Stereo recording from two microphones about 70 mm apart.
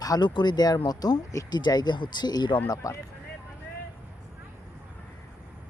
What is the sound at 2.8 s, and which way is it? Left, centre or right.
Speech, left.